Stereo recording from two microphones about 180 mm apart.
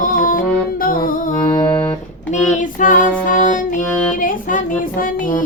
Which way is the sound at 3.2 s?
45° left (ahead or behind).